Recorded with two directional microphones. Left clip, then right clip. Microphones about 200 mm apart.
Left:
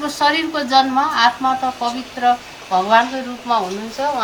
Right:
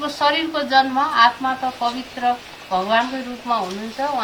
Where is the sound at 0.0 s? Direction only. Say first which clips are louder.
Left 2 dB; 15° left (ahead or behind).